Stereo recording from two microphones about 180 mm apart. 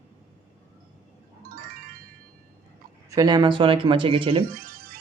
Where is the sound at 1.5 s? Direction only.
55° right (ahead or behind).